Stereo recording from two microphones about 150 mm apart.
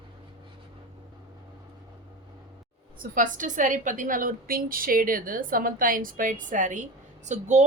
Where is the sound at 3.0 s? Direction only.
60° right (ahead or behind).